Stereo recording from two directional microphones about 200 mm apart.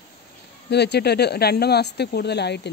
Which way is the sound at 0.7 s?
55° left (ahead or behind).